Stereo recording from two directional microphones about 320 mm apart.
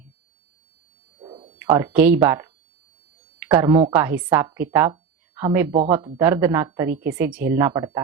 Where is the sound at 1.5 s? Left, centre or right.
Centre.